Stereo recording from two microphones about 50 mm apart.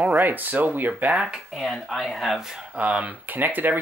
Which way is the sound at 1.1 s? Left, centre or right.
Centre.